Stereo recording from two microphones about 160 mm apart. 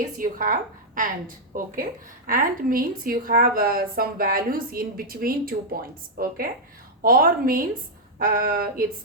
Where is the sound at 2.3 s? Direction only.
60° right (ahead or behind).